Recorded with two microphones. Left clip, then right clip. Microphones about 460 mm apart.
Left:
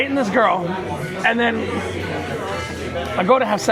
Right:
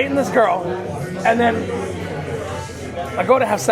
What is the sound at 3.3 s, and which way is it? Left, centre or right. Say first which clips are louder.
Speech: right 1 dB; centre.